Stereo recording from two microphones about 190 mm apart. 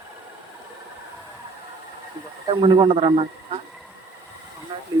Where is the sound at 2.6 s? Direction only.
25° right (ahead or behind).